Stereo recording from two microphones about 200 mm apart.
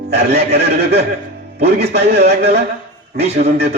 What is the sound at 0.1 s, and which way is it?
A man's voice, 55° right (ahead or behind).